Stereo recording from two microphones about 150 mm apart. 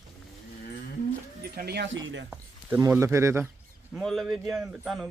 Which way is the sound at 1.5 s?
90° right.